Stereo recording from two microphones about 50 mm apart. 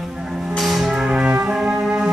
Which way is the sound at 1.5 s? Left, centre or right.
Centre.